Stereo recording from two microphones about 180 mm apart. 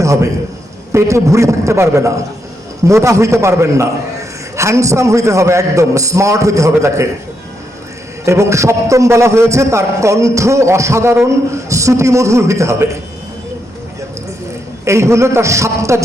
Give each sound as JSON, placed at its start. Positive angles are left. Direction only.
{"t": 0.0, "sound": "a man's voice", "side_deg": -15}
{"t": 8.2, "sound": "a man's voice", "side_deg": -15}
{"t": 14.8, "sound": "a man's voice", "side_deg": -15}